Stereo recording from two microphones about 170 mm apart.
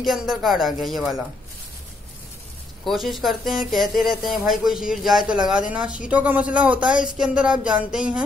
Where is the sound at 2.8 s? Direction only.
Centre (ahead or behind).